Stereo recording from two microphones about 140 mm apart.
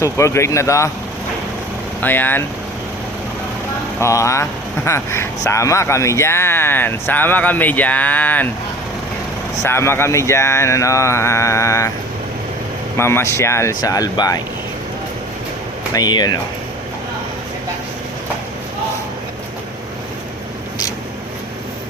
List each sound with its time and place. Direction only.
0.0 s speech: 20° left (ahead or behind)
2.0 s speech: 15° left (ahead or behind)
4.0 s speech: 20° left (ahead or behind)
9.6 s speech: 15° left (ahead or behind)
13.0 s speech: 20° left (ahead or behind)
15.9 s speech: 30° left (ahead or behind)